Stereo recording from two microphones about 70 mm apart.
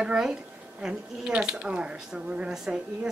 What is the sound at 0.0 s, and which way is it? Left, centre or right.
A woman's voice, centre.